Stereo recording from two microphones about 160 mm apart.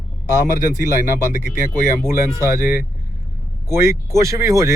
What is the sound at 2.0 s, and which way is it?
Speech, 15° right (ahead or behind).